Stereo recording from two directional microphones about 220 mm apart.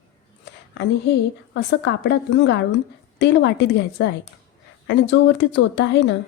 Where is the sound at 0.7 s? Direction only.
50° left (ahead or behind).